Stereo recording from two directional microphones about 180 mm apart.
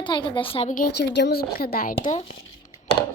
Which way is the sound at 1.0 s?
70° left (ahead or behind).